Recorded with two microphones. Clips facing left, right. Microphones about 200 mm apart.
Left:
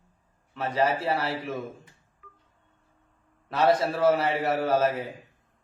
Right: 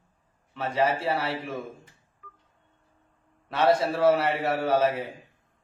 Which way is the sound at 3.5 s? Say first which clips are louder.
Even; centre (ahead or behind).